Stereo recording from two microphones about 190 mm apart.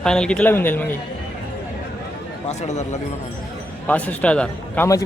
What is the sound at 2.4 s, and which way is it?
Speech, 35° left (ahead or behind).